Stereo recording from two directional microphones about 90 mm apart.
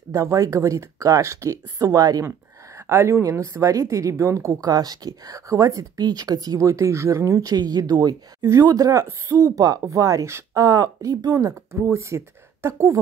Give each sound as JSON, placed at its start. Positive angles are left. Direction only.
{"t": 0.1, "sound": "speech", "side_deg": -40}
{"t": 11.7, "sound": "speech", "side_deg": -25}